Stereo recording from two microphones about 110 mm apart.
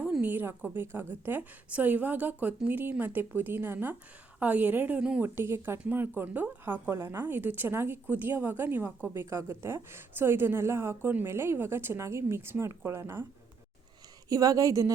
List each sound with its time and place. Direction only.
0.0 s a woman's voice: 15° right (ahead or behind)
5.2 s a woman's voice: 20° right (ahead or behind)
14.3 s speech: 30° right (ahead or behind)